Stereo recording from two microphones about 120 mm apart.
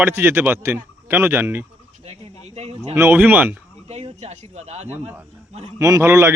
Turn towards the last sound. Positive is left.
turn(degrees=-20)  # may be behind; listen again after turning